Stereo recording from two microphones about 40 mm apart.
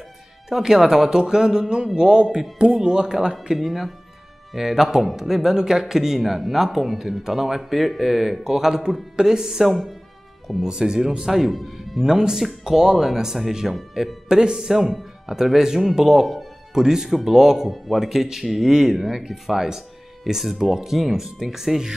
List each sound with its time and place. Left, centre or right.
0.5 s speech: centre
3.5 s speech: centre